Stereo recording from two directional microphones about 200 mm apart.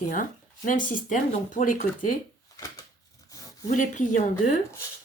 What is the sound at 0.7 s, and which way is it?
Speech, 40° left (ahead or behind).